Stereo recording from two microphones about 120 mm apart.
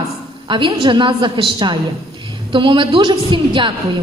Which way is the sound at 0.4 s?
45° right (ahead or behind).